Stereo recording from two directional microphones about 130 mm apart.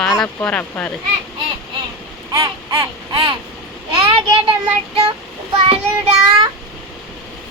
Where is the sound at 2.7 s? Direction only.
40° right (ahead or behind).